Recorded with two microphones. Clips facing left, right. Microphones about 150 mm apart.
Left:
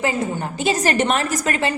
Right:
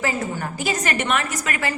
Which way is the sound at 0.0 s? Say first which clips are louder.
Left 3 dB; 20° left (ahead or behind).